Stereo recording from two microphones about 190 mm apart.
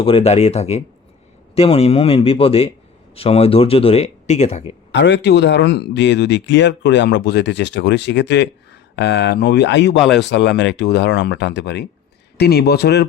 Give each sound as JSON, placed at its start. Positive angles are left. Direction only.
{"t": 0.0, "sound": "speech", "side_deg": 30}
{"t": 4.9, "sound": "speech", "side_deg": 65}